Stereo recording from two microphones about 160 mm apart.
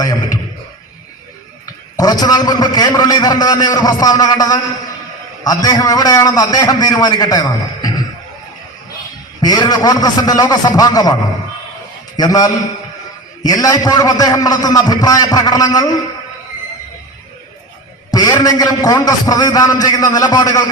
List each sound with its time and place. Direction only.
0.0 s a sound: 20° left (ahead or behind)
2.0 s a man's voice: 25° left (ahead or behind)
9.4 s a man's voice: 25° left (ahead or behind)
18.1 s a man's voice: 25° left (ahead or behind)